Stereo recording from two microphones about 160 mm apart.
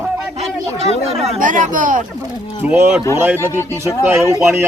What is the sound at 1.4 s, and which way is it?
Speech, 55° right (ahead or behind).